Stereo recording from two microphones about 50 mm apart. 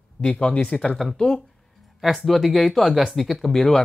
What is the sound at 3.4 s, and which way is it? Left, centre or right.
Speech, centre.